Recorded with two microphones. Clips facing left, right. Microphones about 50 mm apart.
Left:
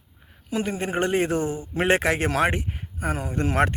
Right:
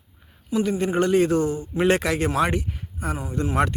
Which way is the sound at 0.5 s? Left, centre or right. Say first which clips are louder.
Right 4 dB; left.